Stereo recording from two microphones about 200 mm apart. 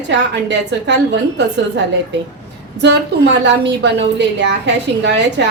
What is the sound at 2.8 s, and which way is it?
A woman's voice, 60° right (ahead or behind).